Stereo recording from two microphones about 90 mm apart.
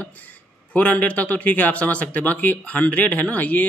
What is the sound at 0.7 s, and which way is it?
Speech, 15° left (ahead or behind).